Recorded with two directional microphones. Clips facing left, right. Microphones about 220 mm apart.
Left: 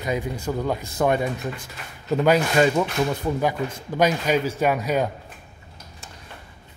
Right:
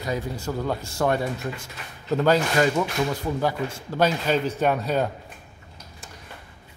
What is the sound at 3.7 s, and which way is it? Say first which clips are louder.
Speech: left 2 dB; 15° left (ahead or behind).